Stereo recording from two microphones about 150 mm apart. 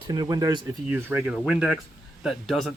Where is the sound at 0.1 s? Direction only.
30° right (ahead or behind).